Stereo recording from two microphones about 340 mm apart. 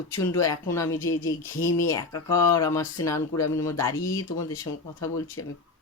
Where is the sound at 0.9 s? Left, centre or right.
Left.